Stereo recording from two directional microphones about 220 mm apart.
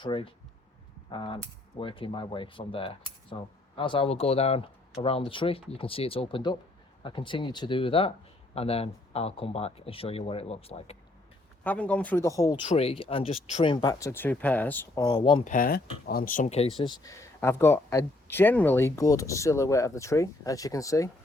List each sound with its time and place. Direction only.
0.0 s speech: 20° left (ahead or behind)
11.6 s speech: 5° left (ahead or behind)
12.4 s speech: 20° left (ahead or behind)
14.9 s speech: 20° left (ahead or behind)
15.4 s speech: 40° left (ahead or behind); by 21.1 s 15° left (ahead or behind)